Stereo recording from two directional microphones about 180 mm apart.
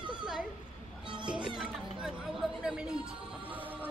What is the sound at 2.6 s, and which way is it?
Speech, 5° right (ahead or behind).